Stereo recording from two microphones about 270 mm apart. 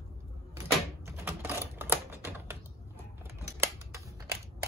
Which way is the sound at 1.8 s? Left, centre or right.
Centre.